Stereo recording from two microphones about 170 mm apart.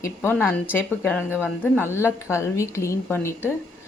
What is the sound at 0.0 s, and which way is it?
Speech, 10° left (ahead or behind).